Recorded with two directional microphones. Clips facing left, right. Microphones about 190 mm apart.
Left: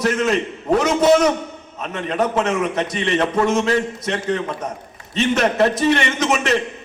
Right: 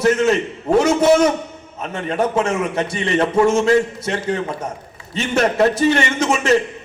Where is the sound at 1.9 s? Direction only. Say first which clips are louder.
Right 1 dB; 30° right (ahead or behind).